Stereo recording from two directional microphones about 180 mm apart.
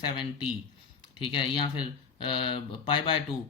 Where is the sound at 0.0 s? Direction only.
25° left (ahead or behind).